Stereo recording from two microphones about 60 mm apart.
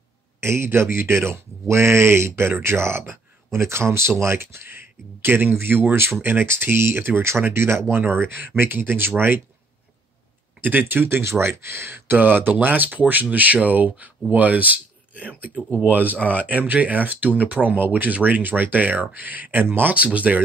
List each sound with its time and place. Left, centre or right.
0.4 s speech: right
10.6 s speech: right
19.9 s speech: right